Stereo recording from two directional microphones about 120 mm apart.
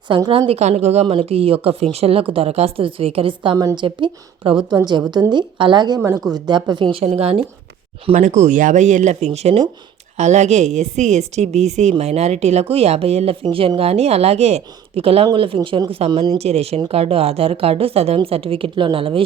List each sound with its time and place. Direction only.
0.3 s a woman's voice: 50° right (ahead or behind)
0.6 s speech: 65° right (ahead or behind)
1.0 s a woman's voice: 55° right (ahead or behind); by 6.0 s 40° right (ahead or behind)
6.0 s a woman's voice: 25° right (ahead or behind); by 7.4 s 50° right (ahead or behind)
8.1 s a woman's voice: 85° right; by 19.2 s 50° right (ahead or behind)